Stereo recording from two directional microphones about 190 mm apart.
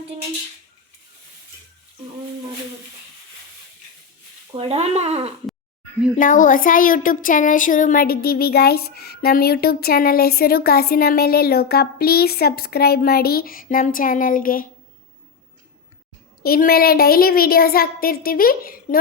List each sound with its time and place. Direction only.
4.5 s speech: 30° right (ahead or behind)
6.1 s speech: 45° left (ahead or behind)
16.4 s speech: 50° left (ahead or behind)